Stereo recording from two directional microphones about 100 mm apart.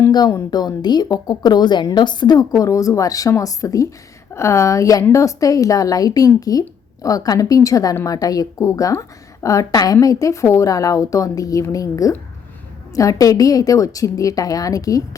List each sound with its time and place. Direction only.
0.1 s a woman's voice: 40° left (ahead or behind)